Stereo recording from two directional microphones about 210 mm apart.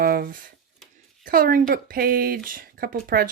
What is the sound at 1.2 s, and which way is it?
Speech, 40° right (ahead or behind).